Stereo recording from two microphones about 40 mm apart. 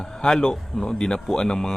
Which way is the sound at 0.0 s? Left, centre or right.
Centre.